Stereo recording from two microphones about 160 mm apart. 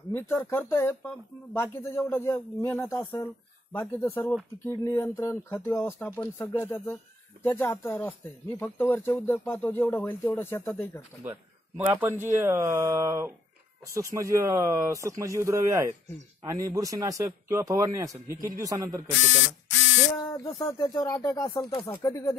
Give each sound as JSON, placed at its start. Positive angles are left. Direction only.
{"t": 0.1, "sound": "speech", "side_deg": 15}
{"t": 10.7, "sound": "speech", "side_deg": 5}
{"t": 11.2, "sound": "speech", "side_deg": -15}
{"t": 20.6, "sound": "speech", "side_deg": 20}